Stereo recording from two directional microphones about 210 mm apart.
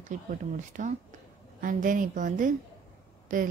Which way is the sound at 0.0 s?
35° right (ahead or behind).